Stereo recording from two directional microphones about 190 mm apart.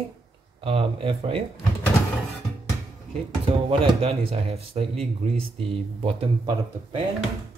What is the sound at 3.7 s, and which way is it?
Speech, 30° right (ahead or behind).